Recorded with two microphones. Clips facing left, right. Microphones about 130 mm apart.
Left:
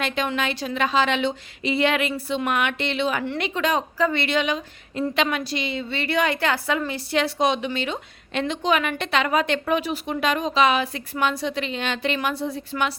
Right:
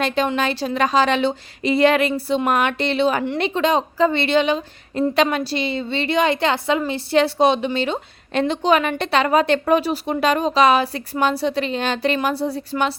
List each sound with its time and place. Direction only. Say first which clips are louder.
0.3 s a woman's voice: right 4 dB; 35° right (ahead or behind)